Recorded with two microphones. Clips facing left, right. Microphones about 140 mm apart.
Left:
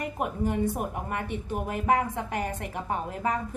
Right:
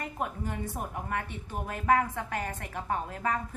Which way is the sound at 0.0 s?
15° left (ahead or behind).